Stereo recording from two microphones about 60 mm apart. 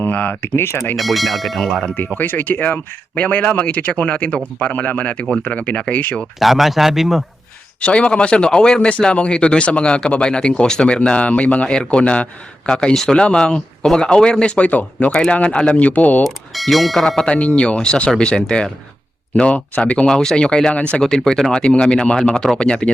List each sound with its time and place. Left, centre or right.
0.0 s speech: left
0.5 s speech: left
0.9 s speech: centre
2.1 s speech: left
6.4 s speech: centre
7.8 s speech: centre
16.2 s speech: centre
17.2 s speech: centre
20.1 s speech: centre